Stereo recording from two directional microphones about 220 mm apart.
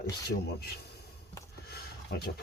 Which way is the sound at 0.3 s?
45° left (ahead or behind).